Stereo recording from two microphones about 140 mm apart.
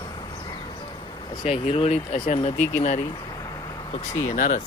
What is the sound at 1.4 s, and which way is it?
Speech, 45° left (ahead or behind).